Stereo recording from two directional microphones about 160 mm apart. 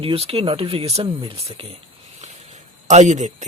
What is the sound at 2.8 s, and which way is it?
Speech, 50° right (ahead or behind).